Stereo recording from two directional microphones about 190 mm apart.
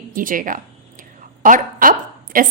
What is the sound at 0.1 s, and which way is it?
A woman's voice, 45° right (ahead or behind).